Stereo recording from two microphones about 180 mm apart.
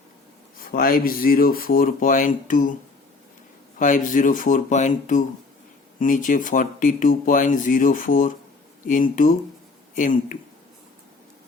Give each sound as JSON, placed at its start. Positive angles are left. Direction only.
{"t": 0.6, "sound": "speech", "side_deg": 55}
{"t": 3.8, "sound": "speech", "side_deg": 45}